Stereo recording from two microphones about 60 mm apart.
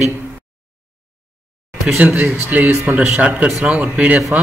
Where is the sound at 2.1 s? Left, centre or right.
Right.